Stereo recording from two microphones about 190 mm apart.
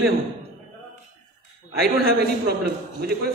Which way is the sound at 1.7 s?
55° right (ahead or behind).